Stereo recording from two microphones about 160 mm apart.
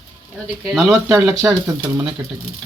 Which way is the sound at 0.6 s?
Centre (ahead or behind).